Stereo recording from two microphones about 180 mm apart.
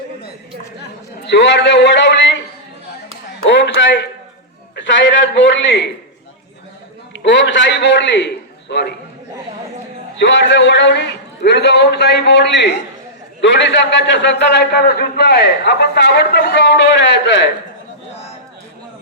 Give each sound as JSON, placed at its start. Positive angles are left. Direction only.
{"t": 1.2, "sound": "a man's voice", "side_deg": 75}
{"t": 3.4, "sound": "a sound", "side_deg": 90}
{"t": 4.7, "sound": "a man's voice", "side_deg": 85}
{"t": 7.3, "sound": "a man's voice", "side_deg": 85}
{"t": 10.2, "sound": "a man's voice", "side_deg": 85}
{"t": 14.1, "sound": "a man's voice", "side_deg": 80}